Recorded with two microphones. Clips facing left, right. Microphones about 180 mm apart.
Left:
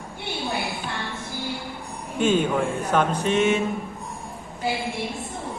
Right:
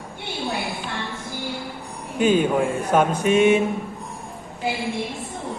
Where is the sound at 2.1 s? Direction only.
5° right (ahead or behind).